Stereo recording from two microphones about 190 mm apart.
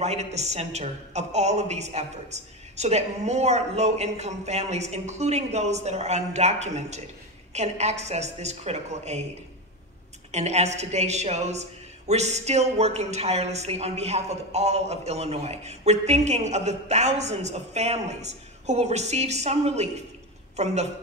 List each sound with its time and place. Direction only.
0.0 s speech: 35° right (ahead or behind)
10.3 s speech: 35° right (ahead or behind)